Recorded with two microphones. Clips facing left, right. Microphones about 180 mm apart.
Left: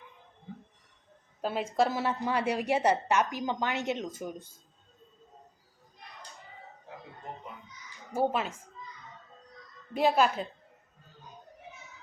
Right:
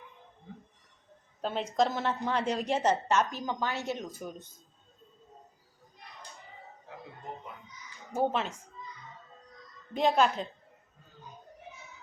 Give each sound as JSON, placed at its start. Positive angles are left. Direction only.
{"t": 1.4, "sound": "a woman's voice", "side_deg": 5}
{"t": 8.1, "sound": "a woman's voice", "side_deg": 10}
{"t": 9.9, "sound": "a woman's voice", "side_deg": 10}